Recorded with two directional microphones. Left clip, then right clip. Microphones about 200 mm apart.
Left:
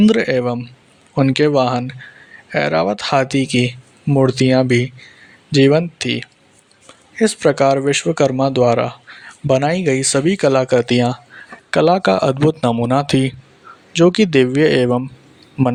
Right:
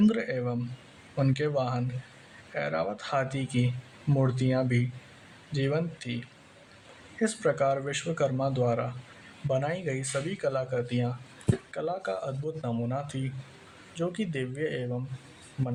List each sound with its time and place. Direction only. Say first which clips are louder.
0.0 s speech: left 14 dB; 45° left (ahead or behind)